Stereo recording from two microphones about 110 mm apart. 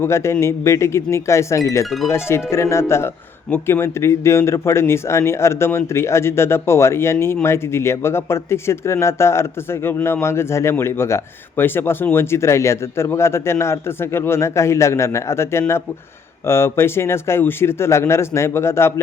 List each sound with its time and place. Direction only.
0.0 s speech: 25° left (ahead or behind)
1.8 s speech: centre (ahead or behind)
2.0 s speech: 25° left (ahead or behind)